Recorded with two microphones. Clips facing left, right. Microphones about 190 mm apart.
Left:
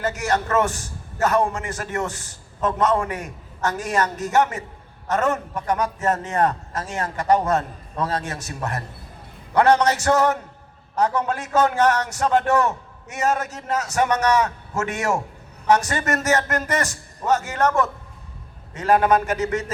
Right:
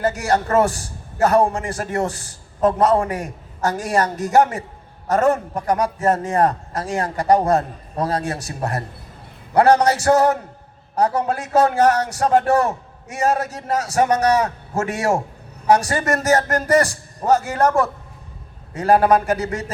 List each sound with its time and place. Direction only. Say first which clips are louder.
0.0 s a man's voice: right 4 dB; 35° right (ahead or behind)